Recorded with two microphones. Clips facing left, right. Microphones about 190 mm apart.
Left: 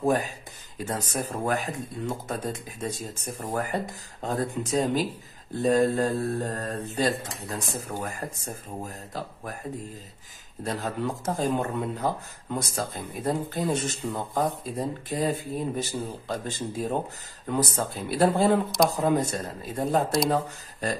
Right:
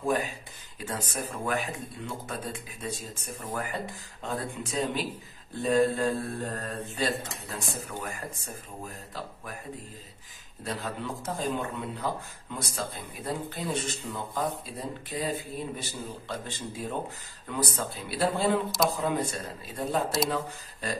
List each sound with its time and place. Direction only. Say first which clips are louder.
0.0 s speech: left 4 dB; 40° left (ahead or behind)
10.6 s speech: left 5 dB; 45° left (ahead or behind)